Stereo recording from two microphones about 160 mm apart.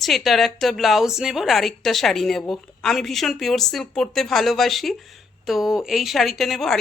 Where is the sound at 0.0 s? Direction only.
Centre (ahead or behind).